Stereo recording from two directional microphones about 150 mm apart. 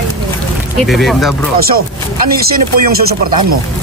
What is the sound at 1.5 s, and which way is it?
Speech, 90° right.